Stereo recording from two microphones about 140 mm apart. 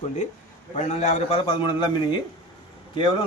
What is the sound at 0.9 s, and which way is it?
Speech, 55° left (ahead or behind).